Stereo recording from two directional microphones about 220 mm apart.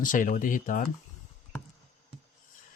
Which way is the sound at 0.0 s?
35° left (ahead or behind).